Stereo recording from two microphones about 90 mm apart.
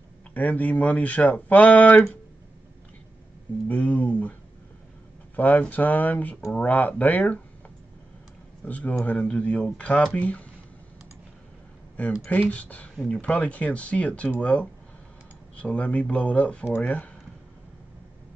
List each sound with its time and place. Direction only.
0.3 s speech: 15° left (ahead or behind)
3.6 s speech: 15° left (ahead or behind)
8.6 s speech: 20° left (ahead or behind)
12.3 s speech: 15° left (ahead or behind)